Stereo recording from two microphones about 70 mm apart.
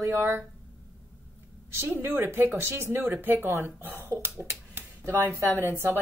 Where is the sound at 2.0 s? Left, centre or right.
Right.